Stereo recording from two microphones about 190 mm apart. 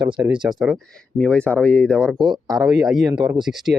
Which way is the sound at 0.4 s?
Centre (ahead or behind).